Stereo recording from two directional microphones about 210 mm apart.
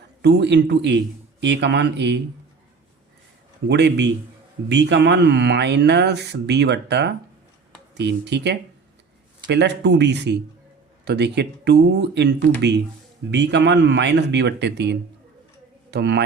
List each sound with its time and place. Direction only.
0.2 s speech: 55° right (ahead or behind)
3.7 s speech: 55° right (ahead or behind)